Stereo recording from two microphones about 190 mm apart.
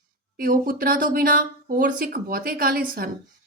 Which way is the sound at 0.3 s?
50° right (ahead or behind).